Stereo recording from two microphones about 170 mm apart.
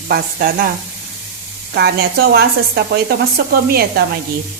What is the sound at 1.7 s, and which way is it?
Speech, 70° right (ahead or behind).